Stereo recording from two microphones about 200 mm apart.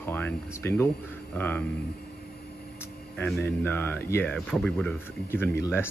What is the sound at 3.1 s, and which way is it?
Speech, 5° left (ahead or behind).